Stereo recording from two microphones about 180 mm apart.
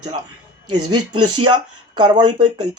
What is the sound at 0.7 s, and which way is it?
Speech, 25° right (ahead or behind).